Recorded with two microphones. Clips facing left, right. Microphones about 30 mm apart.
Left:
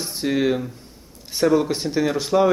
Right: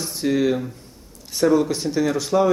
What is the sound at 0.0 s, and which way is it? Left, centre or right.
Speech, centre.